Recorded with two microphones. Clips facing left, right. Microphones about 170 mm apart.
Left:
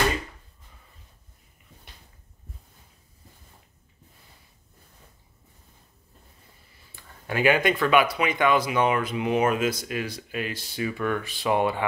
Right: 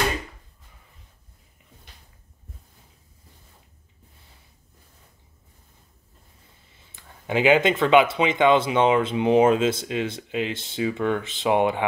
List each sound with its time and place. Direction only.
6.7 s speech: 20° right (ahead or behind)